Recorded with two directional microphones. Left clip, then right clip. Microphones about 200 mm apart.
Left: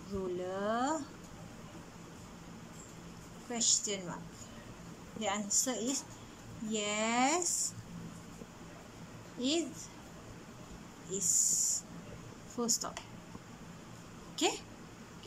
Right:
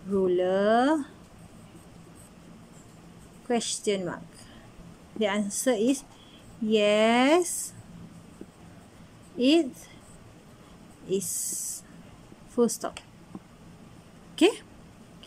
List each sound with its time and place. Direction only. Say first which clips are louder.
0.4 s a sound: right 11 dB; 40° right (ahead or behind)
3.4 s speech: right 6 dB; 40° right (ahead or behind)
5.2 s speech: right 8 dB; 40° right (ahead or behind)
9.4 s speech: right 12 dB; 40° right (ahead or behind)
11.1 s speech: right 3 dB; 40° right (ahead or behind)
14.3 s a sound: right 11 dB; 40° right (ahead or behind)